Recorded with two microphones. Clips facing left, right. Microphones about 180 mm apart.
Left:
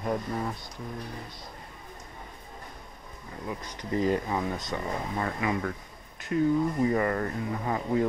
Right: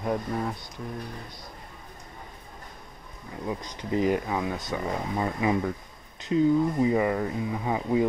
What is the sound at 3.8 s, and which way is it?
Speech, 15° right (ahead or behind).